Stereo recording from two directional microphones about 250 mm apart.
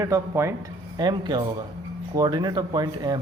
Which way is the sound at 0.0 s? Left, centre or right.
Centre.